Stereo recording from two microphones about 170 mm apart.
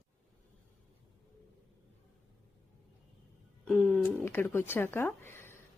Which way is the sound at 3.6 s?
5° left (ahead or behind).